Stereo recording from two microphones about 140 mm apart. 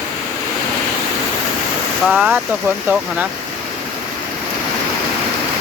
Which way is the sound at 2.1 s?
5° right (ahead or behind).